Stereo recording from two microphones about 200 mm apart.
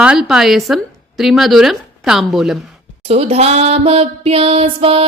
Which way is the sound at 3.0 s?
30° right (ahead or behind).